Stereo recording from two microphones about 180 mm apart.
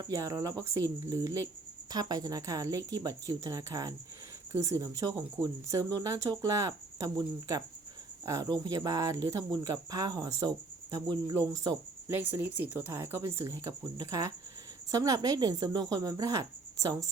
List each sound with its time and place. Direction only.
0.0 s speech: 20° right (ahead or behind)